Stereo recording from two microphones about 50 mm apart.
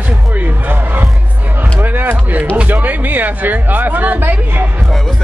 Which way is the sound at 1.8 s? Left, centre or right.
Right.